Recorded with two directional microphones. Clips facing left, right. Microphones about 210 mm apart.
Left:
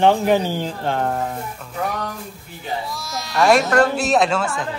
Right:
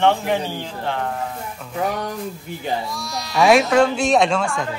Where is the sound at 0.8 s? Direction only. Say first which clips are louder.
Left 3 dB; 40° left (ahead or behind).